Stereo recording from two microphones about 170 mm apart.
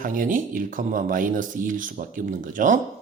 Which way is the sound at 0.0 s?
55° right (ahead or behind).